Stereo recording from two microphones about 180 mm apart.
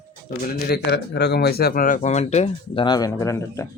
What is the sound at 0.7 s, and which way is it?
Speech, 70° left (ahead or behind).